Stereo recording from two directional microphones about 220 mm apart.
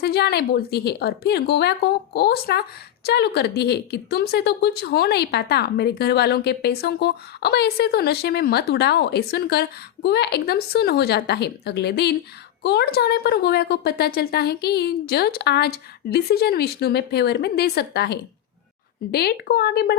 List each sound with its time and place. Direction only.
0.0 s speech: 45° left (ahead or behind)